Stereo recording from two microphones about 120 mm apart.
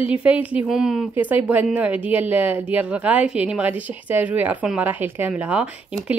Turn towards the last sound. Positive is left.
turn(degrees=-10)  # may be behind; listen again after turning